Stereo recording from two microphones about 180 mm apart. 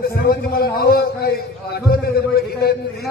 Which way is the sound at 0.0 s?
55° left (ahead or behind).